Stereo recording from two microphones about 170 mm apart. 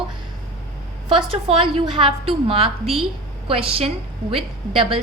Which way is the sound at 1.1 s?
30° right (ahead or behind).